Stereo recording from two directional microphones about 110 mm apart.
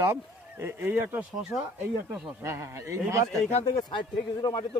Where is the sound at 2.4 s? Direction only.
25° right (ahead or behind).